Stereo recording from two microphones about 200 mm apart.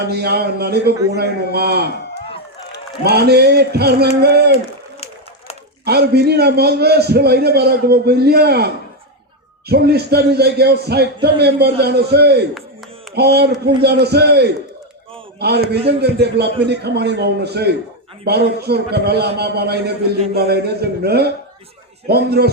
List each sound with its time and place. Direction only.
0.0 s a man's voice: 55° right (ahead or behind)
3.0 s a man's voice: 55° right (ahead or behind)
5.8 s a man's voice: 55° right (ahead or behind)